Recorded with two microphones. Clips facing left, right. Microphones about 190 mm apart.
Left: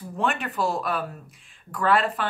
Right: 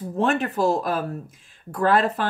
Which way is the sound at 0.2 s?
40° right (ahead or behind).